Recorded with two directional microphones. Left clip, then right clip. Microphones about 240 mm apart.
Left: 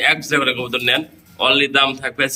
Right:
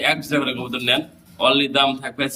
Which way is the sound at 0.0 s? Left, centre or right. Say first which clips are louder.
Left 4 dB; centre.